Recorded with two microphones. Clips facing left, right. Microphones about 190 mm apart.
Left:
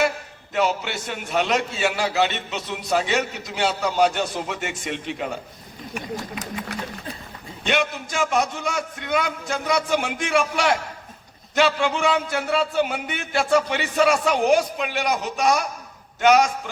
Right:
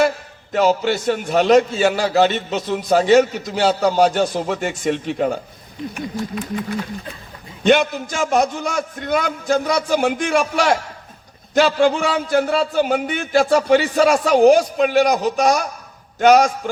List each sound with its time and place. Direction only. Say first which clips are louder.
0.5 s a man's voice: right 7 dB; 40° right (ahead or behind)
7.6 s a man's voice: right 8 dB; 40° right (ahead or behind)